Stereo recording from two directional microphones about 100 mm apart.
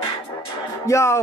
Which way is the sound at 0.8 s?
30° left (ahead or behind).